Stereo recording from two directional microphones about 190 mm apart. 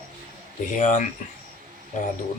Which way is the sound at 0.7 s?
40° left (ahead or behind).